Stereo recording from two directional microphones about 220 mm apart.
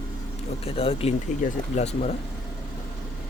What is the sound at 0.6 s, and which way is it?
Speech, 25° left (ahead or behind).